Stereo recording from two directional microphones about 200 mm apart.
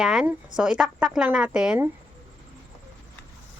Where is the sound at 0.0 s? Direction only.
5° right (ahead or behind).